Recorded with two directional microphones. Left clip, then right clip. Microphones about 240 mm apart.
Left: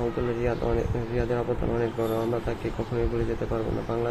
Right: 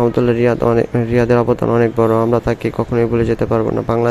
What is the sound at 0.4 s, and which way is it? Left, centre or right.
Speech, right.